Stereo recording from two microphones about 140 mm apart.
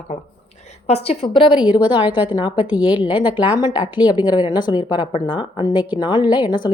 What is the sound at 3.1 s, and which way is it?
A woman's voice, 35° left (ahead or behind).